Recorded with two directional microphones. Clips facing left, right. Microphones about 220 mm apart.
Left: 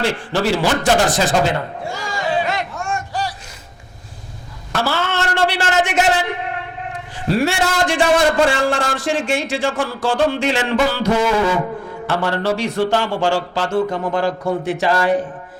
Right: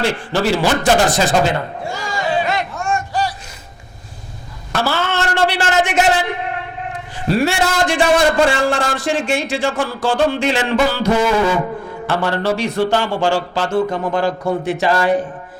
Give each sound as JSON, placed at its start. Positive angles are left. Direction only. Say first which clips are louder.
{"t": 0.0, "sound": "a sound", "louder": "right 1 dB", "side_deg": -15}
{"t": 4.7, "sound": "a sound", "louder": "right 1 dB", "side_deg": -15}
{"t": 7.3, "sound": "a man's voice", "louder": "right 1 dB", "side_deg": -15}
{"t": 9.7, "sound": "a man's voice", "louder": "right 1 dB", "side_deg": -25}
{"t": 13.1, "sound": "a man's voice", "louder": "right 1 dB", "side_deg": -30}
{"t": 14.8, "sound": "a man's voice", "louder": "right 1 dB", "side_deg": -20}